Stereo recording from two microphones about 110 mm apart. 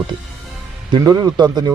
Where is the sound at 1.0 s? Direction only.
40° right (ahead or behind).